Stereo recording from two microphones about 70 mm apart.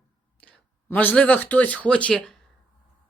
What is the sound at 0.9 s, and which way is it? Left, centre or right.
Speech, left.